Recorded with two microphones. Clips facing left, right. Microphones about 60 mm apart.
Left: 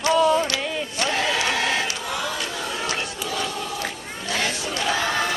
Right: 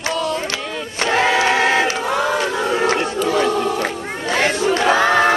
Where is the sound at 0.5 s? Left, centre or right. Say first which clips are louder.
Right 1 dB; right.